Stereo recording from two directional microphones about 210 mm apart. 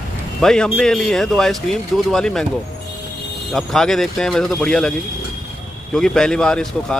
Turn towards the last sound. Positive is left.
turn(degrees=5)  # may be behind; listen again after turning